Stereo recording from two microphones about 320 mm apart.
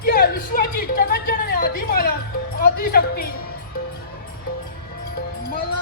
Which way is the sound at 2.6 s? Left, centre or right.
Left.